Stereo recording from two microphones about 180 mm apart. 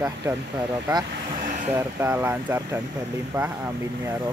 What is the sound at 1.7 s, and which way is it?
Speech, 15° right (ahead or behind).